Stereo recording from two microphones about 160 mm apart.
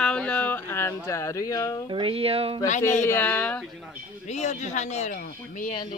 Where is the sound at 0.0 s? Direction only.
5° left (ahead or behind); by 1.8 s 20° left (ahead or behind).